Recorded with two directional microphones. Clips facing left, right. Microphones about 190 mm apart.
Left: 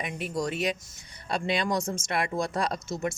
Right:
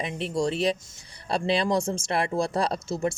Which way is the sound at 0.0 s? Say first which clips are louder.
Right 4 dB; 30° right (ahead or behind).